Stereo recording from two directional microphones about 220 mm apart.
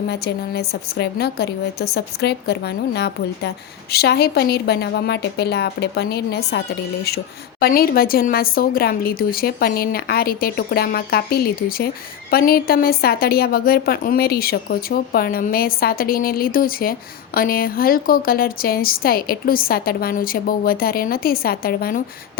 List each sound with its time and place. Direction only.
0.1 s a woman's voice: 50° left (ahead or behind)
7.6 s a woman's voice: 40° left (ahead or behind)